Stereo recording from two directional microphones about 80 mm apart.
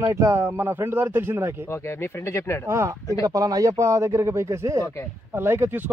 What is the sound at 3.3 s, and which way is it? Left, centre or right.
Speech, right.